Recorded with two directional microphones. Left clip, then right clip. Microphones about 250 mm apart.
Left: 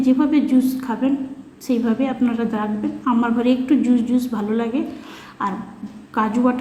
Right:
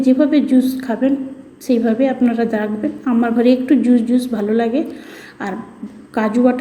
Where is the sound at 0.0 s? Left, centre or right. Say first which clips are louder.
Right 4 dB; centre.